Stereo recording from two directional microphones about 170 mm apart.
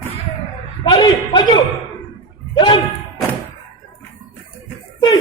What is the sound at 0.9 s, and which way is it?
Speech, 30° left (ahead or behind).